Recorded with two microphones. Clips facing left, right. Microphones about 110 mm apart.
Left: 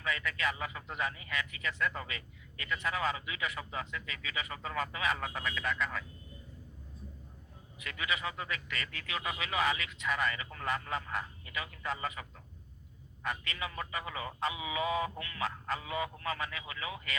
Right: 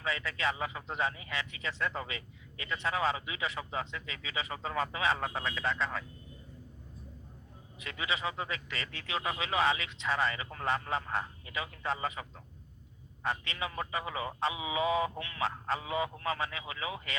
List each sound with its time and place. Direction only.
0.0 s a man's voice: 30° right (ahead or behind)
7.8 s a man's voice: 25° right (ahead or behind)
13.2 s a man's voice: 30° right (ahead or behind)